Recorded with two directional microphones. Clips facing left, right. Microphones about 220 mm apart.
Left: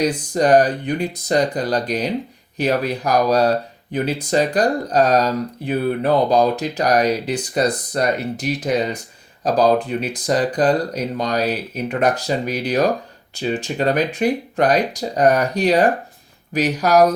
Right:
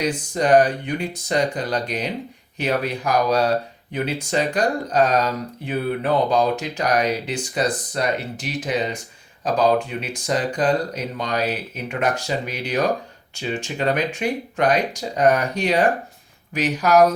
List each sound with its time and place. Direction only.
0.0 s speech: 40° left (ahead or behind)